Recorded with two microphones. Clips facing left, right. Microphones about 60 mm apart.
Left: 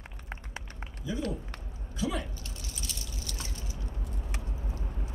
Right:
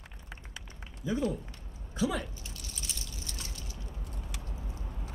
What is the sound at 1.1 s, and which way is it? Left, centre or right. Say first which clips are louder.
Speech: right 2 dB; right.